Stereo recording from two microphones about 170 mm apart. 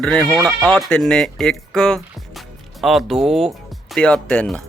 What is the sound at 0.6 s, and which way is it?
Speech, 5° left (ahead or behind).